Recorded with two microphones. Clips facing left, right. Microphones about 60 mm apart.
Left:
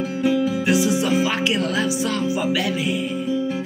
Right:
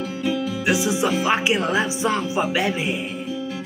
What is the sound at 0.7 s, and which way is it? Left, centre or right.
Music, right.